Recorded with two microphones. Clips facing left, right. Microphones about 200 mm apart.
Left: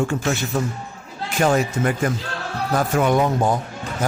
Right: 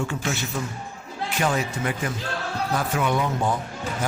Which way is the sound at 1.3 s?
45° left (ahead or behind).